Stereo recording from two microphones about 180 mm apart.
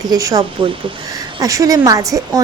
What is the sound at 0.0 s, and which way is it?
Speech, 20° right (ahead or behind).